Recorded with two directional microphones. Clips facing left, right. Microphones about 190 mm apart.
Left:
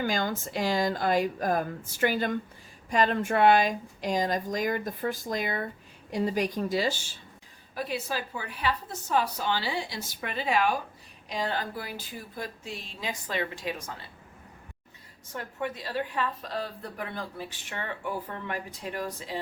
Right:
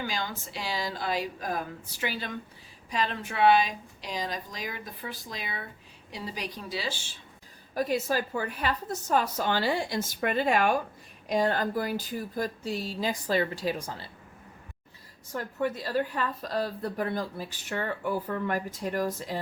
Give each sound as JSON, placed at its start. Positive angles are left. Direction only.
{"t": 0.0, "sound": "speech", "side_deg": 50}
{"t": 7.8, "sound": "a woman's voice", "side_deg": -45}
{"t": 15.4, "sound": "a woman's voice", "side_deg": -40}